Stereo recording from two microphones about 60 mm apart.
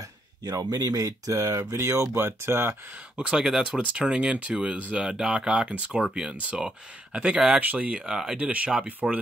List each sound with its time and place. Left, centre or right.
0.5 s speech: right
3.2 s speech: centre
7.6 s speech: right
8.1 s speech: centre
8.5 s speech: right